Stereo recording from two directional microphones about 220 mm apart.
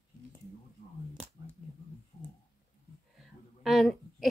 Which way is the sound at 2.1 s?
20° left (ahead or behind).